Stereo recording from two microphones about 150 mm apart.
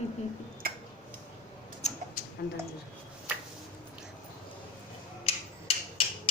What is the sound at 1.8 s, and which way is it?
Tick-tock, 45° left (ahead or behind).